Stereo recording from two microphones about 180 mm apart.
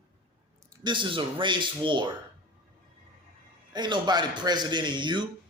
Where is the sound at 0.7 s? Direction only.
25° right (ahead or behind).